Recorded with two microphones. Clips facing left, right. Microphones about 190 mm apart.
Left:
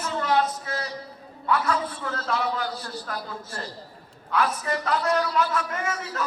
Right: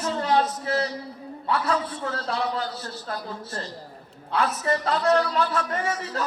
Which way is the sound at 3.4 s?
10° left (ahead or behind).